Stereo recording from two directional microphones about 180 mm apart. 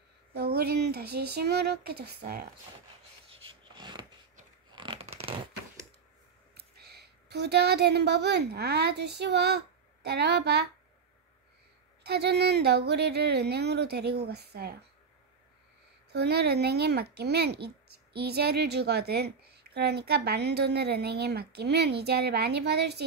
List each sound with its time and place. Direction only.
0.3 s speech: 60° right (ahead or behind)
3.7 s a sound: 25° right (ahead or behind)
6.5 s speech: 65° right (ahead or behind)
12.0 s speech: 65° right (ahead or behind)
16.1 s speech: 65° right (ahead or behind)